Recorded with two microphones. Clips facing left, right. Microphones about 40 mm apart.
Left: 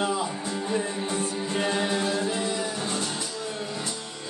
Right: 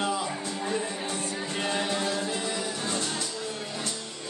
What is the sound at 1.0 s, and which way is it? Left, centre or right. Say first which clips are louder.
Music: left 3 dB; centre.